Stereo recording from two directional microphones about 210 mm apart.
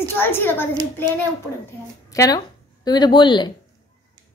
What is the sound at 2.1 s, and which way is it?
A woman's voice, 15° left (ahead or behind).